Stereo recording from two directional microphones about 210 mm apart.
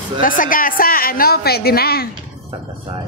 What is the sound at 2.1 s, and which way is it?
Speech, 25° right (ahead or behind).